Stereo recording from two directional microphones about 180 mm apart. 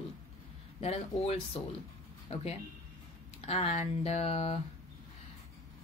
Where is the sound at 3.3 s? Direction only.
35° left (ahead or behind).